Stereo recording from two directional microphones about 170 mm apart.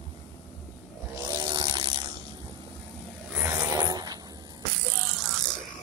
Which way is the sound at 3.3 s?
15° right (ahead or behind).